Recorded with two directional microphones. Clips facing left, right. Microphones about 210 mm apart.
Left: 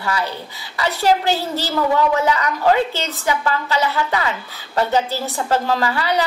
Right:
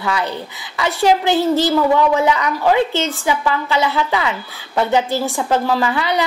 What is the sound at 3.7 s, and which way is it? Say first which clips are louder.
A woman's voice: right 2 dB; 15° right (ahead or behind).